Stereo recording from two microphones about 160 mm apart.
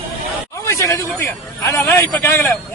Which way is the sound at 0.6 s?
20° left (ahead or behind).